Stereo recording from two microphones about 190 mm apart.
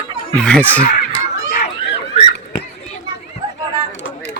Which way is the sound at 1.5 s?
60° left (ahead or behind).